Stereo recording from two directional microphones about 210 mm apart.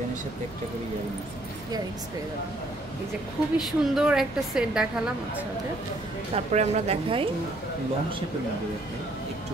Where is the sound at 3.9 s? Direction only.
5° right (ahead or behind).